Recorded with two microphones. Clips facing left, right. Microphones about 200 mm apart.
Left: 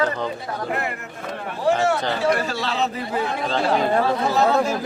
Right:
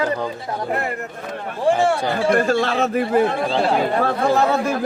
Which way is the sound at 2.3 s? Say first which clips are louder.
Right 8 dB; 50° right (ahead or behind).